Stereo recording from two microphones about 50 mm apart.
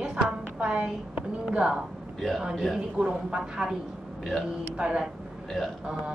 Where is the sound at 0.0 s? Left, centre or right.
Centre.